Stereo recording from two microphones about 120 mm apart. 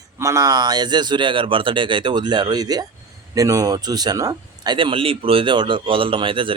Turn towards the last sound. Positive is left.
turn(degrees=-45)  # may be behind; listen again after turning